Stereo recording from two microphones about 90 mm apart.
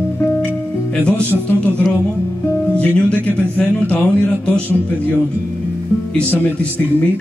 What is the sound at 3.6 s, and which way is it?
A man's voice, 15° left (ahead or behind).